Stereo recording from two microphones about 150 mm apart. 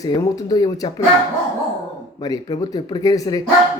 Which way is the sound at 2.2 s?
30° left (ahead or behind).